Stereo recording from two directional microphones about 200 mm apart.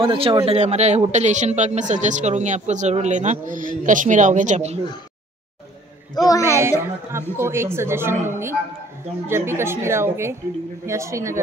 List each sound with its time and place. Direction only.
0.0 s a man's voice: 25° right (ahead or behind)
6.1 s speech: 15° left (ahead or behind)
6.6 s a woman's voice: 15° right (ahead or behind)